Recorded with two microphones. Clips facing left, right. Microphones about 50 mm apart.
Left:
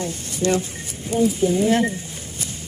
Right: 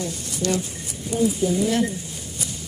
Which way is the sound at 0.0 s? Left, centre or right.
Left.